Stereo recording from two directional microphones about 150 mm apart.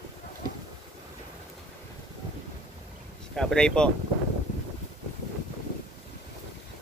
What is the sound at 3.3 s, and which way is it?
Speech, 5° left (ahead or behind).